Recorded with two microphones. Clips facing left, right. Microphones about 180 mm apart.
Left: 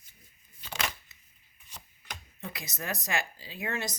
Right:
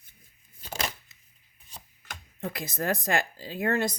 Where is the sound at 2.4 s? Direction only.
55° right (ahead or behind).